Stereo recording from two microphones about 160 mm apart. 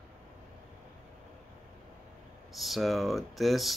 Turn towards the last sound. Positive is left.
turn(degrees=0)  # may be behind; listen again after turning